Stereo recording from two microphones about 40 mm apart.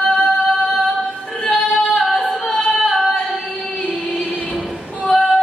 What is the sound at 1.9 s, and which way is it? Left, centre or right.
Female singing, centre.